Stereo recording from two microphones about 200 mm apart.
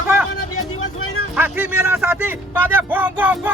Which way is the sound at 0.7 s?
90° left.